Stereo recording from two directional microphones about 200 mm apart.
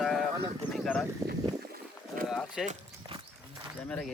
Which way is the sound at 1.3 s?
45° right (ahead or behind).